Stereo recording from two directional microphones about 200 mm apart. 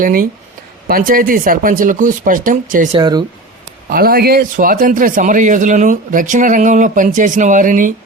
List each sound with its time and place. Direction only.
0.0 s speech: 45° right (ahead or behind)
3.0 s speech: 20° right (ahead or behind)
3.8 s a man's voice: 45° right (ahead or behind)